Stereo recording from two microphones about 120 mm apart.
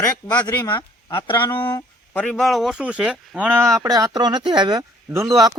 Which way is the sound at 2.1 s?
10° left (ahead or behind).